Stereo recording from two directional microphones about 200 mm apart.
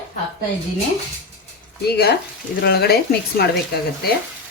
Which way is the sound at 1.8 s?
55° left (ahead or behind).